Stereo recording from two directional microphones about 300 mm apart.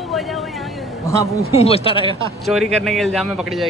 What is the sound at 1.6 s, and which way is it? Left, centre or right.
Speech, centre.